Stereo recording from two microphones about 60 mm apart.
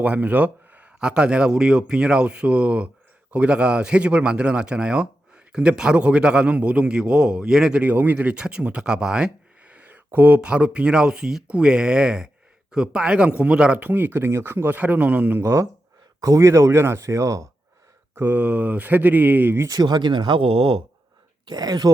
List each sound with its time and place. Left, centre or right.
0.0 s a man's voice: right
7.8 s speech: right
9.7 s a man's voice: right
15.4 s speech: right
17.0 s speech: right
18.1 s speech: right
18.3 s speech: right
21.7 s speech: right